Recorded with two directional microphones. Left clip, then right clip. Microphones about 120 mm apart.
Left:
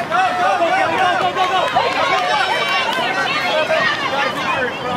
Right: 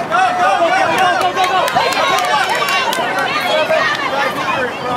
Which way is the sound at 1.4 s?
35° right (ahead or behind).